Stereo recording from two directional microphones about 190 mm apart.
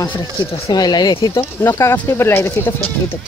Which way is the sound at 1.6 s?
15° left (ahead or behind).